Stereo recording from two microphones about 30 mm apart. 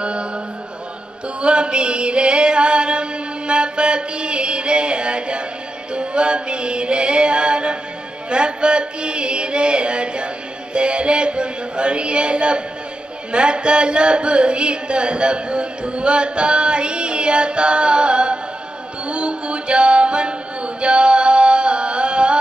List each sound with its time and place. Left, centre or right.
0.0 s music: right
1.4 s music: right
8.3 s a sound: right
19.0 s music: right